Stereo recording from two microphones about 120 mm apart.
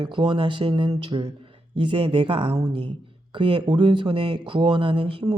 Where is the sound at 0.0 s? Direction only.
40° right (ahead or behind).